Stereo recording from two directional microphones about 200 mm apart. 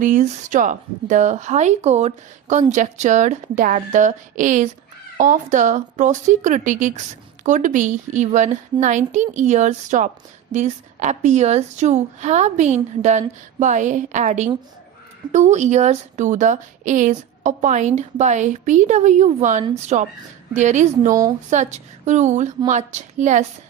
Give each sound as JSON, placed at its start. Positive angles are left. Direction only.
{"t": 0.0, "sound": "speech", "side_deg": -40}